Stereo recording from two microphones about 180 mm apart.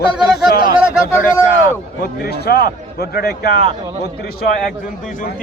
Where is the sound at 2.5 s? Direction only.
60° left (ahead or behind).